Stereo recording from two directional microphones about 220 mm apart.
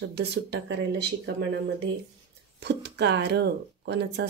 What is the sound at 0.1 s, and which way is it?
Speech, 50° right (ahead or behind).